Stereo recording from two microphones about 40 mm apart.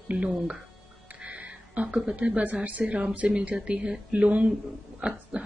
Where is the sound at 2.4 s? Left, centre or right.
Right.